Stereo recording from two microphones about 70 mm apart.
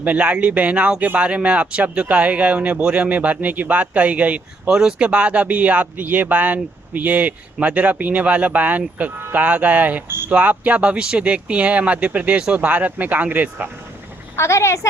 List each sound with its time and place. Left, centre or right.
0.0 s speech: centre
14.3 s a woman's voice: left